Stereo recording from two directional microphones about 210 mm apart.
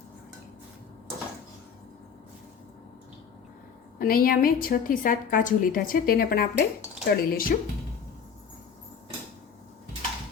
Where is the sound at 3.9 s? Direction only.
45° left (ahead or behind).